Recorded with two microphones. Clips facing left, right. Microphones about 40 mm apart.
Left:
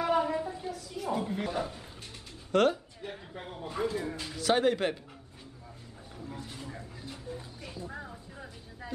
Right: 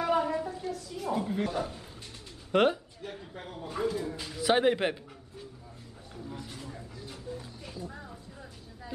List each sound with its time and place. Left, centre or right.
0.0 s a sound: centre
0.7 s a woman's voice: centre
2.5 s a man's voice: centre
3.0 s speech: centre
4.4 s a man's voice: centre
6.3 s a sound: centre
7.2 s vehicle: centre